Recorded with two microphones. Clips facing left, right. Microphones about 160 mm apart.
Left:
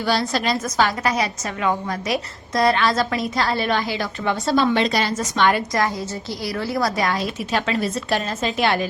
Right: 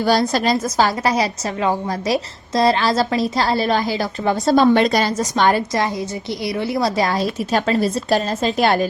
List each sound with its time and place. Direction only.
0.0 s a woman's voice: 40° right (ahead or behind)
6.4 s a woman's voice: 20° right (ahead or behind); by 8.9 s 40° right (ahead or behind)